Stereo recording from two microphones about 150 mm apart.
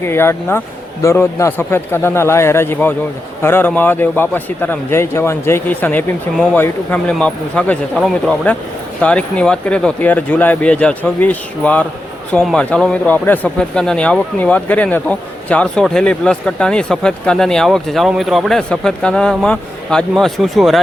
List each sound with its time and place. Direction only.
0.0 s speech: 15° left (ahead or behind); by 20.8 s centre (ahead or behind)